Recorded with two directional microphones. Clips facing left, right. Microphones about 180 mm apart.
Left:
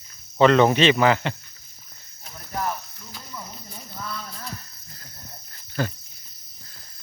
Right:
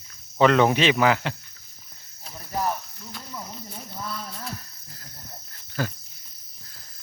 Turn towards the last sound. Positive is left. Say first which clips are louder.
# left 2 dB
turn(degrees=-5)  # may be behind; listen again after turning